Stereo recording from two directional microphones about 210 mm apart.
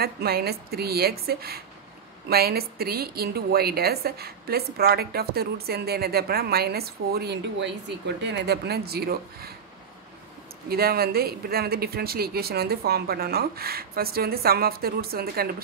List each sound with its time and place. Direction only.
0.0 s a woman's voice: 50° right (ahead or behind)
10.7 s a woman's voice: 45° right (ahead or behind)